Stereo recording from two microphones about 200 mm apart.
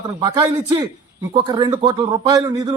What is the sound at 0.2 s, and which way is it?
A man's voice, 20° right (ahead or behind).